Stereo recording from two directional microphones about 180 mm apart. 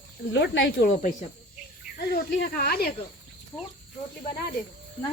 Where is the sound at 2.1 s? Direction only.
55° left (ahead or behind).